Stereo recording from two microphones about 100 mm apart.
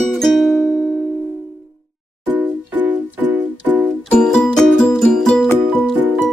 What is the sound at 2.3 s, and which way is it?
Music, 15° right (ahead or behind).